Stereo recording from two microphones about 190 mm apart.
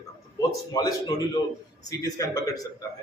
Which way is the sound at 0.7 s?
20° left (ahead or behind).